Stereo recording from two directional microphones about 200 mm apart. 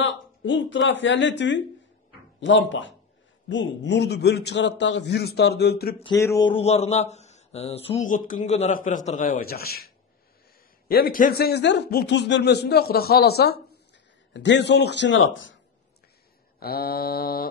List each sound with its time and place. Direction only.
0.0 s a man's voice: 70° left (ahead or behind); by 5.9 s 55° left (ahead or behind)
6.1 s speech: 15° left (ahead or behind)
6.6 s a man's voice: 30° left (ahead or behind)
8.1 s a man's voice: 40° left (ahead or behind); by 15.6 s 70° left (ahead or behind)
16.5 s speech: 50° left (ahead or behind)